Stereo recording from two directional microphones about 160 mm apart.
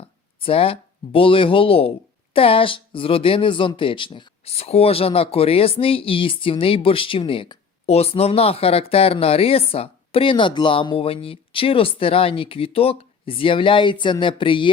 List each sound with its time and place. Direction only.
0.4 s speech: 35° left (ahead or behind)